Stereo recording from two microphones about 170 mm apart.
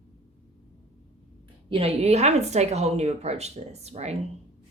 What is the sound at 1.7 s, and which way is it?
A woman's voice, 35° right (ahead or behind).